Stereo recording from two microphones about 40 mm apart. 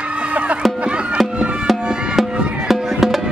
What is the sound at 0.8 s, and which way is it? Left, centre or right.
Music, right.